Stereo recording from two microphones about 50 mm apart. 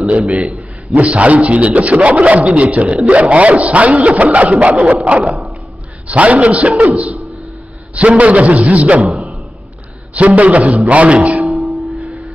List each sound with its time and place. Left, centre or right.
0.9 s a man's voice: right
7.9 s a man's voice: right
9.1 s a sound: right
10.1 s a man's voice: right
11.4 s music: centre